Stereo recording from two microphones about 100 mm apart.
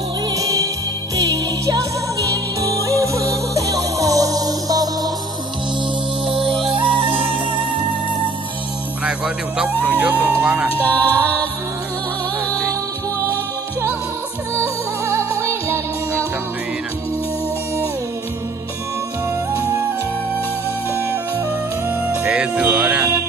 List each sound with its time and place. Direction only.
0.3 s music: 35° right (ahead or behind)
6.2 s music: 65° right (ahead or behind)
9.0 s music: 10° right (ahead or behind)
10.8 s music: 15° left (ahead or behind)
14.5 s music: 25° right (ahead or behind)
21.8 s music: 10° right (ahead or behind)